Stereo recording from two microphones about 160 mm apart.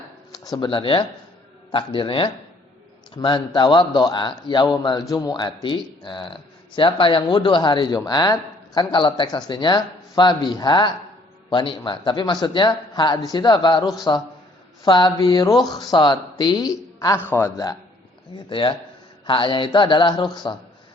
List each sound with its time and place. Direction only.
0.3 s a man's voice: 25° left (ahead or behind)
18.4 s a man's voice: 30° left (ahead or behind)